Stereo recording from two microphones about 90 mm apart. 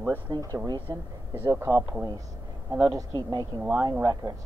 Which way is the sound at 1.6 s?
30° right (ahead or behind).